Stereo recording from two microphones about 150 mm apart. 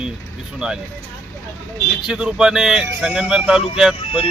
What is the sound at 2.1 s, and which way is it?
Speech, 5° right (ahead or behind).